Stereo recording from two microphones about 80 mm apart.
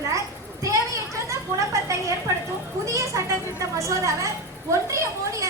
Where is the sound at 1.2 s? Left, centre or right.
Right.